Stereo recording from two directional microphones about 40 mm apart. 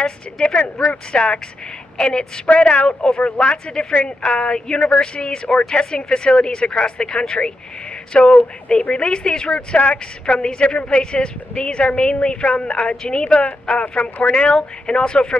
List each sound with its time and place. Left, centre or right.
0.0 s a woman's voice: left